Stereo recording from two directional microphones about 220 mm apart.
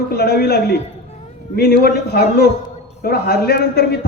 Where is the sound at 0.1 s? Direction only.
45° left (ahead or behind).